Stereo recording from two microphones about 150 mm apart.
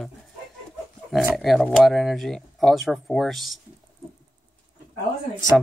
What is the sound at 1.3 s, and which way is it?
Speech, centre (ahead or behind).